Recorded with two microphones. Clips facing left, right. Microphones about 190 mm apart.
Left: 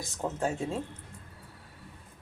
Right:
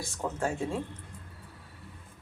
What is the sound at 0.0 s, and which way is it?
Speech, 20° left (ahead or behind).